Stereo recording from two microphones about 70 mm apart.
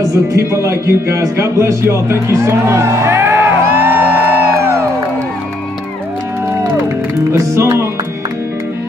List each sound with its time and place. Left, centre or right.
0.1 s speech: right
7.3 s music: right